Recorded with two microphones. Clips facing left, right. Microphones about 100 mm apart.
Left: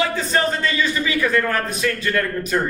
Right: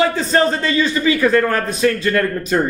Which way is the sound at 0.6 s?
35° right (ahead or behind).